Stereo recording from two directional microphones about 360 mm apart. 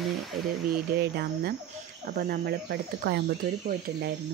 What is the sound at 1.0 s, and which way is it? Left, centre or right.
Speech, right.